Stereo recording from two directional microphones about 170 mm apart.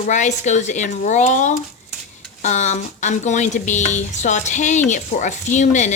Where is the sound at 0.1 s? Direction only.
45° left (ahead or behind).